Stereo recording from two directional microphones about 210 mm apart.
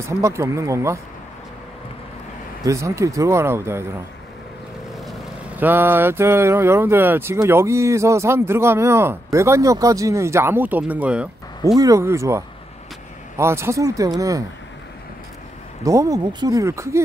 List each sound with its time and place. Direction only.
0.0 s vehicle: 15° right (ahead or behind)
2.6 s vehicle: 15° right (ahead or behind)
5.0 s vehicle: 5° right (ahead or behind)
15.8 s vehicle: 15° right (ahead or behind)